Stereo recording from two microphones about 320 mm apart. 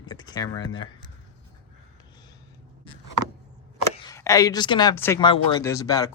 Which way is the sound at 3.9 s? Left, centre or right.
Centre.